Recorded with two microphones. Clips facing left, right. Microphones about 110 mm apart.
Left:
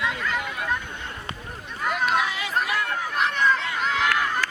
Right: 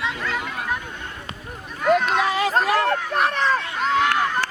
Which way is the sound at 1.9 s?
5° left (ahead or behind).